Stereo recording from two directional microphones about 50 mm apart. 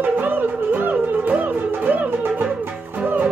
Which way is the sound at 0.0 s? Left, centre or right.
Right.